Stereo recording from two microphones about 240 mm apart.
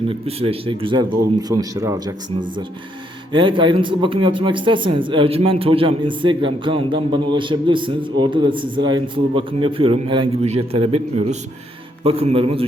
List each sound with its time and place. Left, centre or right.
0.1 s speech: right
3.3 s speech: centre